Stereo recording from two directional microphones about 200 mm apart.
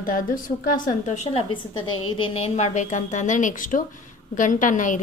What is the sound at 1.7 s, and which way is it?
Speech, 90° left.